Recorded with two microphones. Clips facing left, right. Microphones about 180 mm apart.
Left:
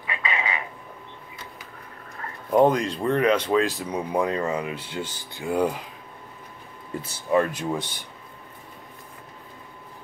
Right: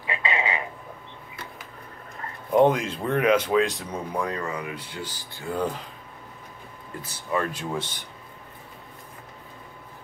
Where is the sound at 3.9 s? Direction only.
20° left (ahead or behind).